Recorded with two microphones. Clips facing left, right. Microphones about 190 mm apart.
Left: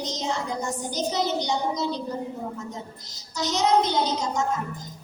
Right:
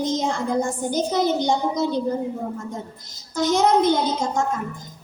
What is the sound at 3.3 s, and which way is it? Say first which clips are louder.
Speech: right 4 dB; 50° right (ahead or behind).